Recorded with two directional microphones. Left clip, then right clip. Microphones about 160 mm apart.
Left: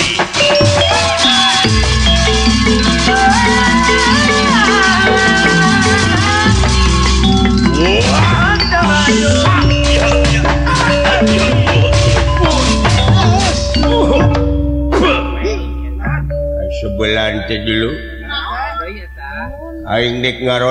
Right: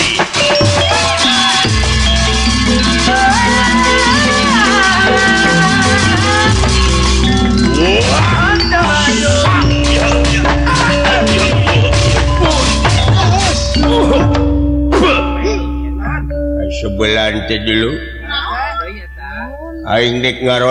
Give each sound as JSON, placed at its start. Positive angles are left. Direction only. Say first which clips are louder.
{"t": 0.0, "sound": "music", "louder": "even", "side_deg": 45}
{"t": 17.0, "sound": "music", "louder": "right 2 dB", "side_deg": 45}
{"t": 19.9, "sound": "a man's voice", "louder": "right 2 dB", "side_deg": 45}